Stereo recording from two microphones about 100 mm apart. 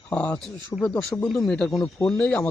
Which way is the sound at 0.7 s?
25° left (ahead or behind).